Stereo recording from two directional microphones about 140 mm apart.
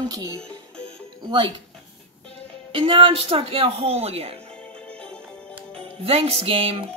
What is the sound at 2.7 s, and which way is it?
Speech, 40° right (ahead or behind).